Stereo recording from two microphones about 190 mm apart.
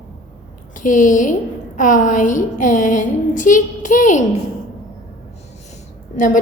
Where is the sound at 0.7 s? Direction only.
40° left (ahead or behind).